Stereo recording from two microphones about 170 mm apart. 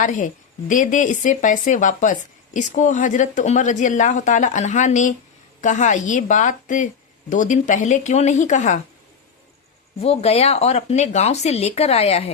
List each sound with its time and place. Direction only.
0.0 s speech: 50° left (ahead or behind)
10.0 s speech: 35° left (ahead or behind)